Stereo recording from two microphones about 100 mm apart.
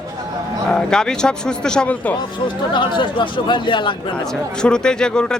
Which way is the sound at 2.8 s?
55° left (ahead or behind).